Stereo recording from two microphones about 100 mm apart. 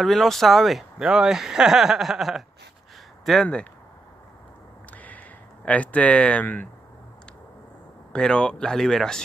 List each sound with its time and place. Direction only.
0.0 s speech: centre (ahead or behind)
4.9 s a sound: 15° left (ahead or behind)
5.7 s speech: 15° left (ahead or behind)
8.1 s speech: 10° left (ahead or behind)